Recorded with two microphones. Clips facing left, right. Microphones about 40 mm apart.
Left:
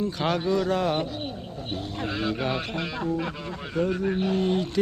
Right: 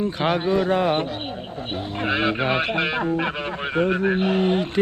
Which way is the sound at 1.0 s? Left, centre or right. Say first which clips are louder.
Right 3 dB; right.